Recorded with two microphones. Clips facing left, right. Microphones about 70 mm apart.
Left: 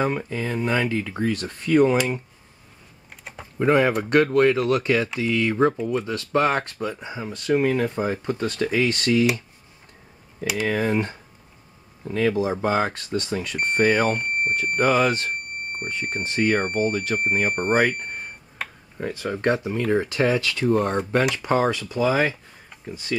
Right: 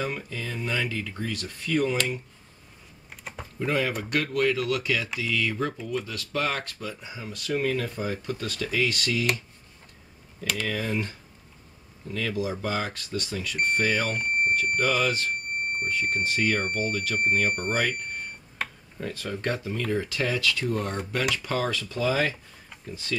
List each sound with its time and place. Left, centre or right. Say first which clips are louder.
0.0 s speech: left 7 dB; left
3.1 s typing: even; centre
3.5 s speech: left 8 dB; left
10.4 s speech: left 5 dB; centre
10.7 s speech: left 7 dB; left
18.6 s tick-tock: even; centre
18.9 s speech: left 5 dB; left